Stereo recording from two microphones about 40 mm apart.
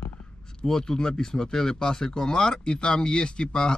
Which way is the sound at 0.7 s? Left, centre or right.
Centre.